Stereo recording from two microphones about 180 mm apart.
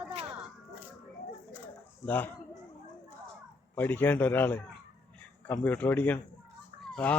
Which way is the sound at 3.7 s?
10° left (ahead or behind).